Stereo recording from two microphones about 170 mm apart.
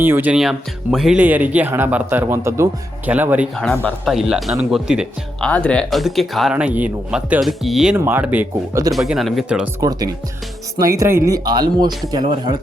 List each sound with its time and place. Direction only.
0.0 s speech: 10° right (ahead or behind)
3.5 s speech: 5° left (ahead or behind)
5.5 s speech: 10° left (ahead or behind)
9.8 s speech: 20° right (ahead or behind)